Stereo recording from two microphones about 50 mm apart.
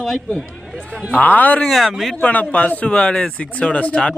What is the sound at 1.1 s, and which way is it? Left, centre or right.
Speech, left.